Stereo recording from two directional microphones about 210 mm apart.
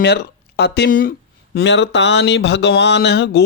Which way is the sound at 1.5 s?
55° left (ahead or behind).